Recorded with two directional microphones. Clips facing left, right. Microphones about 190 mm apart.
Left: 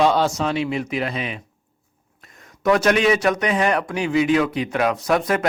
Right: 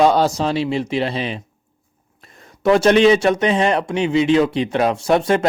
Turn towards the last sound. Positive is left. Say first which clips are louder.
# right 4 dB
turn(degrees=-30)  # may be behind; listen again after turning